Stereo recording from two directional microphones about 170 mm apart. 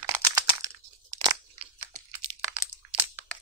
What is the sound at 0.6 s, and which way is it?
Crushing, 20° right (ahead or behind).